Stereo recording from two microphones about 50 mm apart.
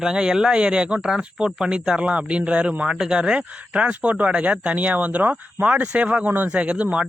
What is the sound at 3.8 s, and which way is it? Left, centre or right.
Speech, right.